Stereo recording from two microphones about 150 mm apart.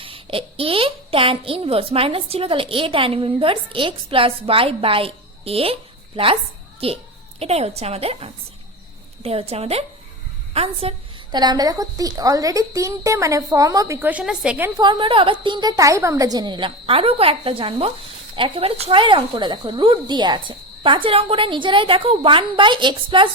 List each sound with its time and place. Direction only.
0.0 s speech: 35° right (ahead or behind)
6.7 s a child's voice: 40° right (ahead or behind)
10.5 s a sound: 40° right (ahead or behind)
11.3 s a woman's voice: 25° right (ahead or behind); by 14.7 s 10° right (ahead or behind)
14.8 s speech: 30° right (ahead or behind)